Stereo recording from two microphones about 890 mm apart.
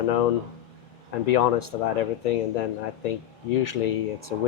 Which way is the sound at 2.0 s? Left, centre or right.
Left.